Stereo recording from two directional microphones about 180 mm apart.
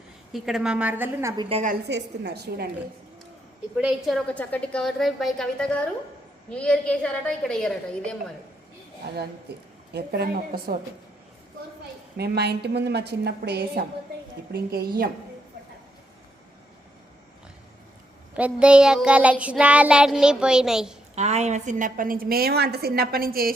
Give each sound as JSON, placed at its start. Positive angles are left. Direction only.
{"t": 0.3, "sound": "a woman's voice", "side_deg": 0}
{"t": 1.4, "sound": "a woman's voice", "side_deg": -30}
{"t": 1.9, "sound": "a woman's voice", "side_deg": -65}
{"t": 3.8, "sound": "child singing", "side_deg": -5}
{"t": 9.9, "sound": "a woman's voice", "side_deg": -65}
{"t": 12.1, "sound": "a woman's voice", "side_deg": -65}
{"t": 18.3, "sound": "child singing", "side_deg": -5}
{"t": 21.2, "sound": "a woman's voice", "side_deg": -40}